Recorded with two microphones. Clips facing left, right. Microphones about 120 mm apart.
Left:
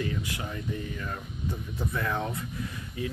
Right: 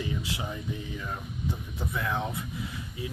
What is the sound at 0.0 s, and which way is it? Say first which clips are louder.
Speech: left 1 dB; 15° right (ahead or behind).